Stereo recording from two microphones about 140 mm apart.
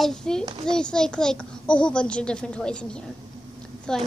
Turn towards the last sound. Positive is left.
turn(degrees=5)  # may be behind; listen again after turning